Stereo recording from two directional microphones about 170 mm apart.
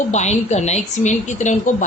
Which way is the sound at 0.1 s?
40° left (ahead or behind).